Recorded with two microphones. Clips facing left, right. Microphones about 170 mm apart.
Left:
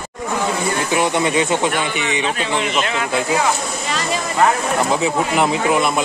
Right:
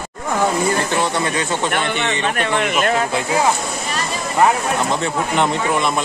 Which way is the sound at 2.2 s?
55° right (ahead or behind).